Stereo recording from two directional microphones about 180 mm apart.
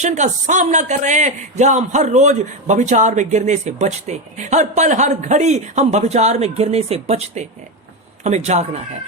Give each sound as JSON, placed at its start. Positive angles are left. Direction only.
{"t": 0.0, "sound": "a man's voice", "side_deg": -40}